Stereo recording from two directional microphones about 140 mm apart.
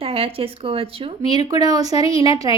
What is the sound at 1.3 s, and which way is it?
Speech, 30° right (ahead or behind).